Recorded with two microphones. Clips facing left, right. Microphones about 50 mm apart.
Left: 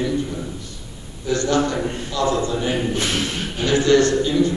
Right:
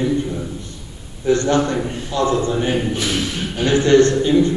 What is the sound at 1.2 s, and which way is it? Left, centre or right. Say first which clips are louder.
A man's voice: right 3 dB; right.